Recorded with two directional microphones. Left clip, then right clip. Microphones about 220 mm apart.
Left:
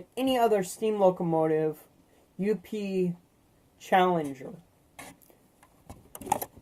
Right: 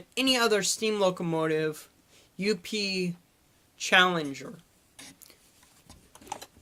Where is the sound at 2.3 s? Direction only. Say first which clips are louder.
Right 1 dB; 25° right (ahead or behind).